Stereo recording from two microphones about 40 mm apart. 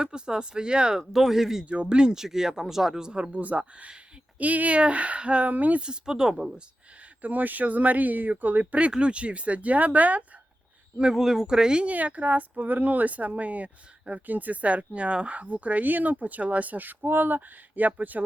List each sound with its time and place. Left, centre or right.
0.0 s speech: centre
1.3 s speech: centre
1.6 s speech: right
2.1 s speech: centre
3.3 s speech: right
5.5 s speech: right
5.8 s speech: centre
7.2 s speech: right
8.9 s speech: right
11.1 s speech: centre
11.9 s speech: right